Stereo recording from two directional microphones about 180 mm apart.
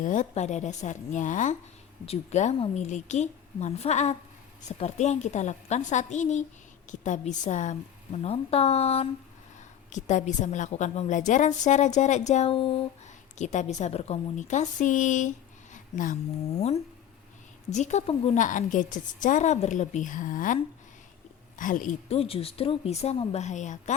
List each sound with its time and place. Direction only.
0.0 s a woman's voice: 45° left (ahead or behind)
13.4 s a woman's voice: 40° left (ahead or behind)
15.7 s a sound: 45° left (ahead or behind)
16.6 s a woman's voice: 35° left (ahead or behind)
18.3 s a woman's voice: 45° left (ahead or behind)
21.6 s a woman's voice: 45° left (ahead or behind)
22.2 s a woman's voice: 35° left (ahead or behind)